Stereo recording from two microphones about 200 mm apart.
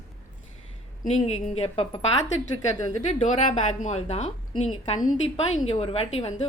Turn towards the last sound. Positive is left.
turn(degrees=30)  # may be behind; listen again after turning